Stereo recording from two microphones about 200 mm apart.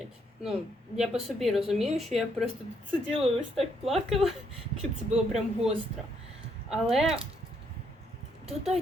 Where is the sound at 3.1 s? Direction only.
30° right (ahead or behind).